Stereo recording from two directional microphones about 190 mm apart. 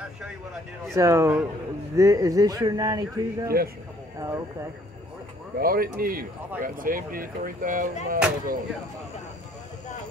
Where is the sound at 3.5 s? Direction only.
50° right (ahead or behind).